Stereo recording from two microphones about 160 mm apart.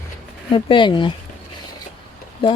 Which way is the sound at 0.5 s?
30° left (ahead or behind).